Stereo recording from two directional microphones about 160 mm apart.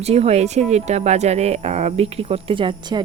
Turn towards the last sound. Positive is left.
turn(degrees=-30)  # may be behind; listen again after turning